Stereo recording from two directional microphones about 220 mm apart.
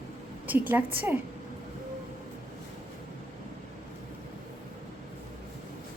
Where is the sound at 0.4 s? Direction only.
10° right (ahead or behind).